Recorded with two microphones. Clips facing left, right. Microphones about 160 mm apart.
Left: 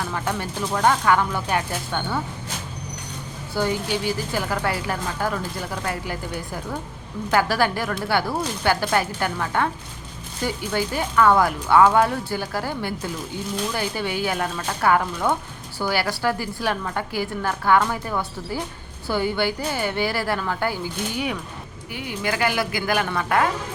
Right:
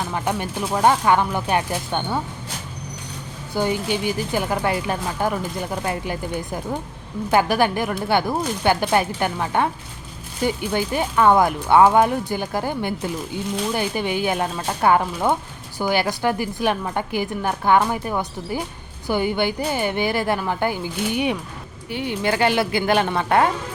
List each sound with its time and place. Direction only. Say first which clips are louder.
0.0 s speech: right 2 dB; 20° right (ahead or behind)
3.5 s speech: right 2 dB; 15° right (ahead or behind)